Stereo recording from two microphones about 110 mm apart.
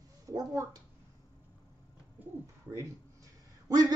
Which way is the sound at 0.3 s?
35° right (ahead or behind).